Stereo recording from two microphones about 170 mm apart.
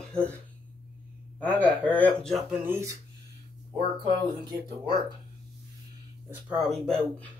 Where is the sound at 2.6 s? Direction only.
15° right (ahead or behind).